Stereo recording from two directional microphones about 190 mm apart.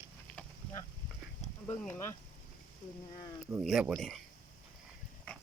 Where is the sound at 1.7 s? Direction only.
10° left (ahead or behind).